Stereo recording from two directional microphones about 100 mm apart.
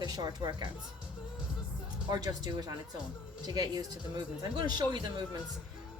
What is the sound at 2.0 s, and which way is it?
A woman's voice, 40° right (ahead or behind).